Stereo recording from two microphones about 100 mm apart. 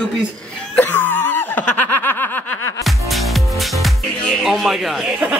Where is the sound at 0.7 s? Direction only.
20° left (ahead or behind).